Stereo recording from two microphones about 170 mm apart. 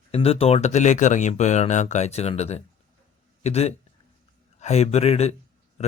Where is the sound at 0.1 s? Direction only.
35° left (ahead or behind).